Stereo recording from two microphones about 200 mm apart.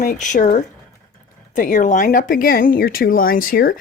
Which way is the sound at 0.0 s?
40° left (ahead or behind).